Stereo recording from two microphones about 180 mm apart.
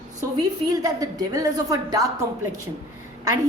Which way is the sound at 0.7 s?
20° right (ahead or behind).